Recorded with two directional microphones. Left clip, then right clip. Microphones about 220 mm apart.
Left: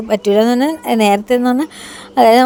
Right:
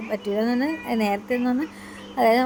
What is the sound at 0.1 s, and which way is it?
Speech, 35° left (ahead or behind).